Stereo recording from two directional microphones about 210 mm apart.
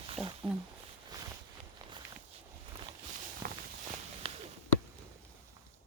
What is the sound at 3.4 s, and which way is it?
Walk, 45° right (ahead or behind).